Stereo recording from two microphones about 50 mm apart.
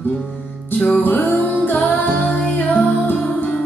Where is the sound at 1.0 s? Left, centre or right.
Left.